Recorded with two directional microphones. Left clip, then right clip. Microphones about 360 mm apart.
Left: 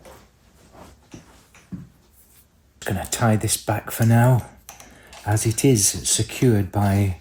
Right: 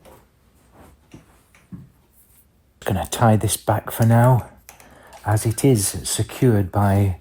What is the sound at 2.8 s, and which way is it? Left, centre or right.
Speech, centre.